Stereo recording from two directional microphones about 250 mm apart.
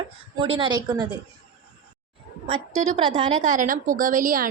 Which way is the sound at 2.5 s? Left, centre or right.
Right.